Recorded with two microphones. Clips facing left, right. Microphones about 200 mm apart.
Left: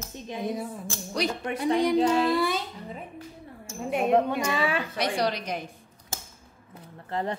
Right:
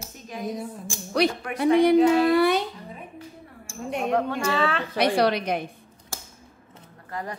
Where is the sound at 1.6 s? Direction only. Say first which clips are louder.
Right 6 dB; 60° right (ahead or behind).